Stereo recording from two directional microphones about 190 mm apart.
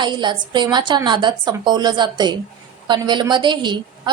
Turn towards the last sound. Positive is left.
turn(degrees=-25)  # may be behind; listen again after turning